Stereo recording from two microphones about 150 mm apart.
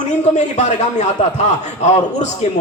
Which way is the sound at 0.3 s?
50° left (ahead or behind).